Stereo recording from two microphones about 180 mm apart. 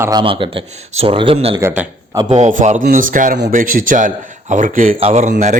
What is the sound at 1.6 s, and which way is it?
Speech, 15° right (ahead or behind).